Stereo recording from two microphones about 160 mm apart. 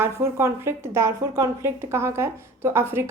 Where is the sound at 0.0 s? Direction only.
15° right (ahead or behind).